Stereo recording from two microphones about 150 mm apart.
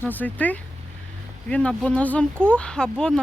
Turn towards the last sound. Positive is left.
turn(degrees=5)  # may be behind; listen again after turning